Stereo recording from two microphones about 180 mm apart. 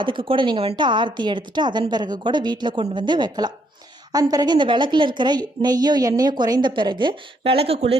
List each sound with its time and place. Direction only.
0.0 s a woman's voice: 25° right (ahead or behind)